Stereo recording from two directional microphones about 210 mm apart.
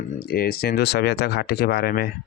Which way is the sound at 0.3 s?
45° left (ahead or behind).